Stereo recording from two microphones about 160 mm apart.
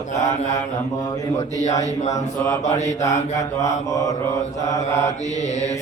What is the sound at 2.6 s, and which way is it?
Mantra, 45° left (ahead or behind).